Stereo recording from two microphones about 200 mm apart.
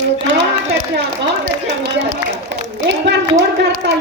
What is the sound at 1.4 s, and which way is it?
A woman's voice, 50° right (ahead or behind).